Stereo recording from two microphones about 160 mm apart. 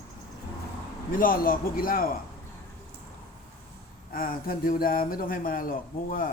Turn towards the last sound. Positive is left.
turn(degrees=60)  # may be behind; listen again after turning